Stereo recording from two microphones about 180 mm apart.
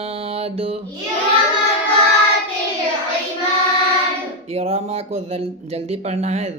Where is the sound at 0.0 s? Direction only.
35° right (ahead or behind).